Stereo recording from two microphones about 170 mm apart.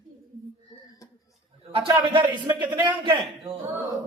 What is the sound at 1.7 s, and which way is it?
Speech, 30° right (ahead or behind).